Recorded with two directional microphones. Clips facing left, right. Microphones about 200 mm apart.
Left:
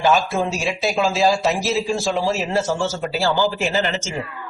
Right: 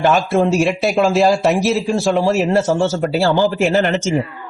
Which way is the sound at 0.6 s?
60° right (ahead or behind).